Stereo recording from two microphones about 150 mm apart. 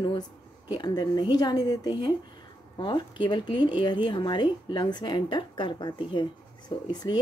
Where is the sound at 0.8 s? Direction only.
30° left (ahead or behind).